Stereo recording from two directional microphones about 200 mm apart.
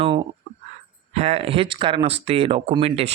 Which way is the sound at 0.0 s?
25° right (ahead or behind).